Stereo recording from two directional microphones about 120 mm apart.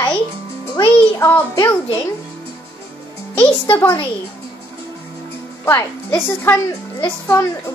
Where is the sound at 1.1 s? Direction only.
20° left (ahead or behind).